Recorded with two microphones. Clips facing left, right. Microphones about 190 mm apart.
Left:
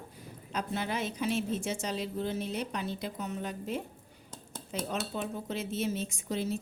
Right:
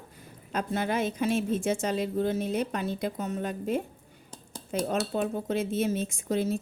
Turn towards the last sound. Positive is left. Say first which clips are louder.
# right 5 dB
turn(degrees=-50)  # may be behind; listen again after turning